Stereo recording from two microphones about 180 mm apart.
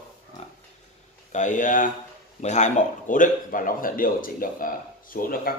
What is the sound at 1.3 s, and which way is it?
A man's voice, 45° left (ahead or behind).